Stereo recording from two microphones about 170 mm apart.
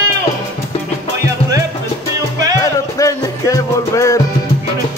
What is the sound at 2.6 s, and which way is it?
Music, 20° left (ahead or behind).